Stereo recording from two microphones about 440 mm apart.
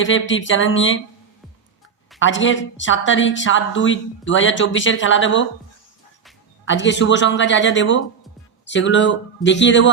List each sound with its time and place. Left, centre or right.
0.0 s a woman's voice: left
2.1 s a woman's voice: left
6.7 s a woman's voice: left